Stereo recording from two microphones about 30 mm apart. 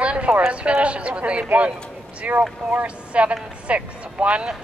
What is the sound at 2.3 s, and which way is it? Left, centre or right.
Speech, right.